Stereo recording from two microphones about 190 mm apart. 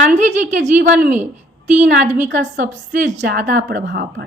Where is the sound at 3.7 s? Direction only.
65° right (ahead or behind).